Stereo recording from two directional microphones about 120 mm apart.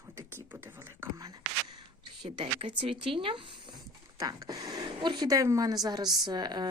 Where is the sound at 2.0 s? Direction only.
45° right (ahead or behind).